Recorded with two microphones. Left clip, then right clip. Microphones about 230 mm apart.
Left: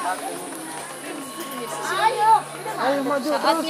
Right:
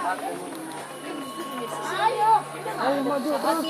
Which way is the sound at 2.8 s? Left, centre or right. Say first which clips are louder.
Left 3 dB; right.